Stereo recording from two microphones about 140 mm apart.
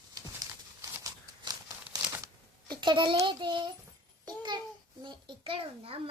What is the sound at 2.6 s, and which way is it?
A child's voice, 35° right (ahead or behind).